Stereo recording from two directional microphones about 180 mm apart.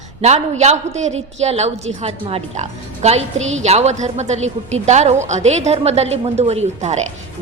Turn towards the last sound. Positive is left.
turn(degrees=-40)  # may be behind; listen again after turning